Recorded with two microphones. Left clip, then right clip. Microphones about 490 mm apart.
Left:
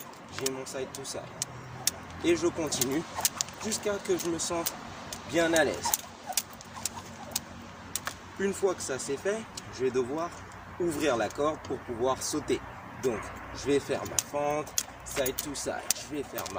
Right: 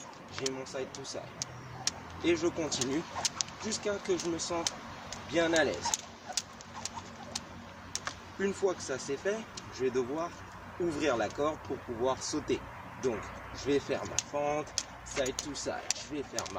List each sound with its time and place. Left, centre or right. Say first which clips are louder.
0.3 s speech: left 2 dB; right
5.1 s a sound: left 3 dB; right
7.9 s speech: left 2 dB; right